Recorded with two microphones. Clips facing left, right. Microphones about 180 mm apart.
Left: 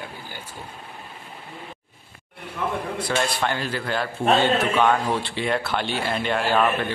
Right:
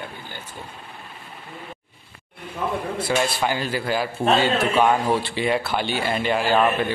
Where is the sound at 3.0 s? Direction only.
5° right (ahead or behind).